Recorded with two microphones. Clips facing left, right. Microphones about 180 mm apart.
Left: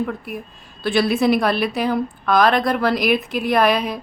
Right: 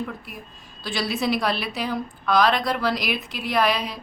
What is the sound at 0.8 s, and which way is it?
A woman's voice, 60° left (ahead or behind).